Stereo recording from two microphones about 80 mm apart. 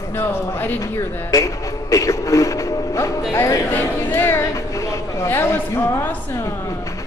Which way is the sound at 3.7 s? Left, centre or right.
Left.